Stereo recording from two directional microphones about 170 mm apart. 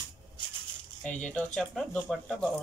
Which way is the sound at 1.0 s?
5° left (ahead or behind).